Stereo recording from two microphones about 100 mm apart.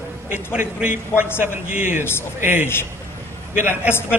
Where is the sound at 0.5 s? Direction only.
10° right (ahead or behind).